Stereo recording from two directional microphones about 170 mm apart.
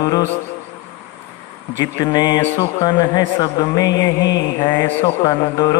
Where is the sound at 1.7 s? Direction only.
25° left (ahead or behind).